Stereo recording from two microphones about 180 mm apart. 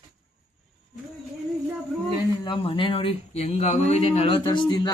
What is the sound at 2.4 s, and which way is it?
Speech, 30° left (ahead or behind).